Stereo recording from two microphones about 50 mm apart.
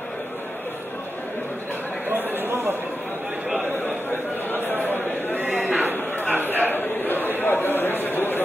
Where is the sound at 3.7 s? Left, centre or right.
Left.